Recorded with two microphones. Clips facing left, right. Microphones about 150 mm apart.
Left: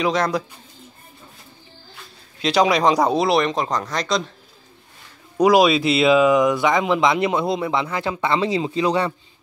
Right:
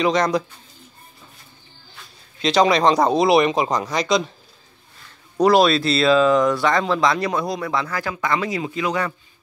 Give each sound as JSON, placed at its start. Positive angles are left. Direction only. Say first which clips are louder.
{"t": 0.0, "sound": "speech", "louder": "right 2 dB", "side_deg": 5}
{"t": 2.4, "sound": "speech", "louder": "right 1 dB", "side_deg": 5}
{"t": 5.4, "sound": "speech", "louder": "left 1 dB", "side_deg": 10}